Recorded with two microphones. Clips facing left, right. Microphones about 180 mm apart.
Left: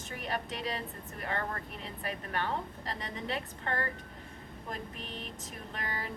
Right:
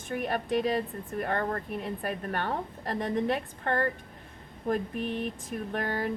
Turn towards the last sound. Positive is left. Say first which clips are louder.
# right 9 dB
turn(degrees=-55)  # may be behind; listen again after turning